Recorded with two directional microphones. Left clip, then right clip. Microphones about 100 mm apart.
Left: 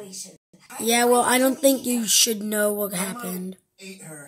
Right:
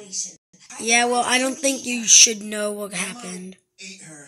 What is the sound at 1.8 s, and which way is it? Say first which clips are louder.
Speech: right 6 dB; 40° left (ahead or behind).